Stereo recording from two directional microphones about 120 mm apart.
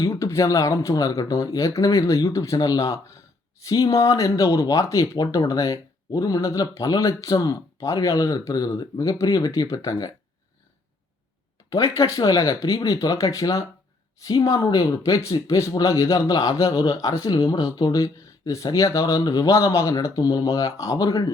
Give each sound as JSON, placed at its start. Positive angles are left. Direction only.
{"t": 0.2, "sound": "speech", "side_deg": 25}
{"t": 11.7, "sound": "speech", "side_deg": 25}